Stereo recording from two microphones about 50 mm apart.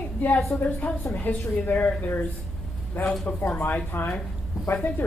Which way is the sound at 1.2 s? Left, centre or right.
Left.